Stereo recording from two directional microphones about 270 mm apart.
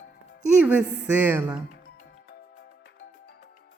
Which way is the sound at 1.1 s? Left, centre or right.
Centre.